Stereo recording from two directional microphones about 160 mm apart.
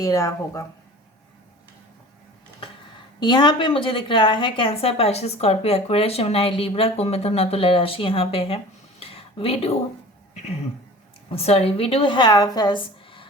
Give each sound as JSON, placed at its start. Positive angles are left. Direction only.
{"t": 0.0, "sound": "speech", "side_deg": 20}
{"t": 3.2, "sound": "a woman's voice", "side_deg": 30}
{"t": 11.3, "sound": "a woman's voice", "side_deg": 40}